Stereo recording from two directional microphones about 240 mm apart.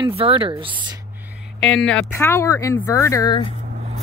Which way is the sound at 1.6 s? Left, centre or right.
Centre.